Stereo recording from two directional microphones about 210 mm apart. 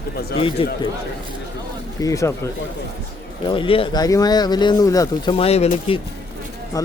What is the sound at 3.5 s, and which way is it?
Speech, 25° left (ahead or behind).